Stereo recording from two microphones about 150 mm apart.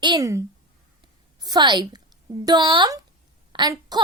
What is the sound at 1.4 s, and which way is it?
A woman's voice, 25° right (ahead or behind).